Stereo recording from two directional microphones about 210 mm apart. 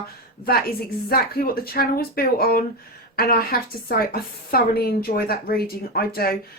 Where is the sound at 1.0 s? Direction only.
45° left (ahead or behind).